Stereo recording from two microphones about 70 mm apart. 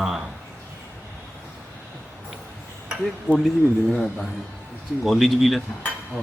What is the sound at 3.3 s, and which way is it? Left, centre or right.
Speech, left.